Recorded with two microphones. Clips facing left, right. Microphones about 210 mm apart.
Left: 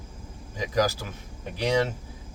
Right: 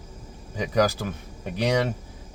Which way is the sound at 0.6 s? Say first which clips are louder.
Right 3 dB; 60° right (ahead or behind).